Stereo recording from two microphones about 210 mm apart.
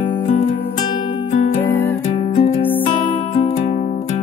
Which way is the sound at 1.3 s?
35° left (ahead or behind).